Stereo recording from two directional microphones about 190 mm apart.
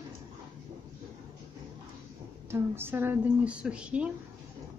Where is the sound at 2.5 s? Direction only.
10° right (ahead or behind).